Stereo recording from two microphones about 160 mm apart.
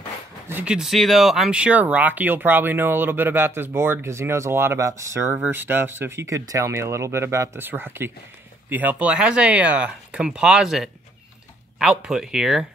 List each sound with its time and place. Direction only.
0.5 s speech: 10° right (ahead or behind)